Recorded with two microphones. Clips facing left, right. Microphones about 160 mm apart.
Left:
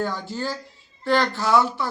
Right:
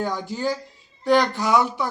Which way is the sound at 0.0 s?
15° right (ahead or behind).